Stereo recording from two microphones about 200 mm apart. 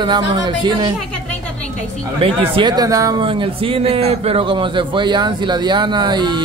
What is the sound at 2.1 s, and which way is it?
A man's voice, 25° right (ahead or behind).